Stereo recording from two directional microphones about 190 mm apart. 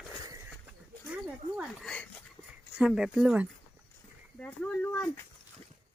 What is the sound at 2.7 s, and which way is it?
Speech, 5° right (ahead or behind).